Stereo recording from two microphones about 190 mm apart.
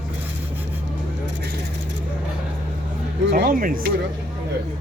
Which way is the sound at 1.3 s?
65° right (ahead or behind).